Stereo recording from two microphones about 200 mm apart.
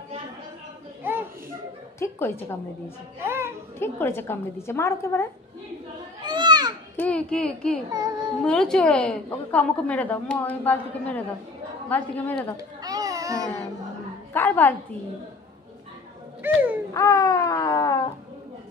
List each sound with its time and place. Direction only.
2.0 s a woman's voice: 10° left (ahead or behind)
3.3 s music: 10° right (ahead or behind)
3.8 s a woman's voice: 10° left (ahead or behind)
6.2 s children playing: 20° right (ahead or behind)
7.0 s speech: 5° left (ahead or behind)
7.9 s a child's voice: 20° right (ahead or behind)
8.5 s a woman's voice: 5° left (ahead or behind)
12.5 s a sound: 15° right (ahead or behind)
14.3 s a woman's voice: 10° left (ahead or behind)
16.4 s a sound: 10° right (ahead or behind)
16.9 s a sound: 15° left (ahead or behind)